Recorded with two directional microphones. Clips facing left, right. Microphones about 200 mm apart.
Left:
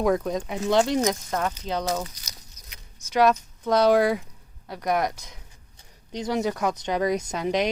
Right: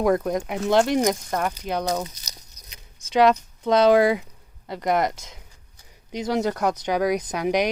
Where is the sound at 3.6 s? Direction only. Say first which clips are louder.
Right 3 dB; 15° right (ahead or behind).